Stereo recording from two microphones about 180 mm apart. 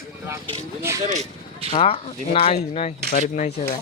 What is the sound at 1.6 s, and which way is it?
Speech, 30° left (ahead or behind).